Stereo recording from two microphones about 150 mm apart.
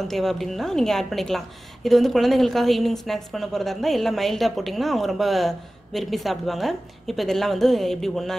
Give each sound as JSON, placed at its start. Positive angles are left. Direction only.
{"t": 0.1, "sound": "a woman's voice", "side_deg": 0}